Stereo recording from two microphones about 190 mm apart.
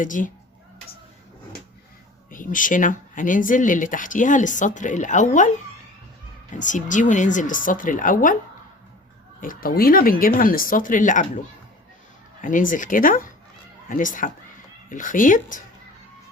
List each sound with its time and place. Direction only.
0.0 s speech: 45° left (ahead or behind)
2.3 s speech: 45° left (ahead or behind)
6.6 s speech: 40° left (ahead or behind)
9.4 s speech: 45° left (ahead or behind)
12.4 s speech: 45° left (ahead or behind)